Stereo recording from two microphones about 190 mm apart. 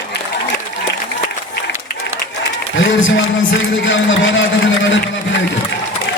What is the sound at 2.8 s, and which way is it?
A man's voice, 85° left.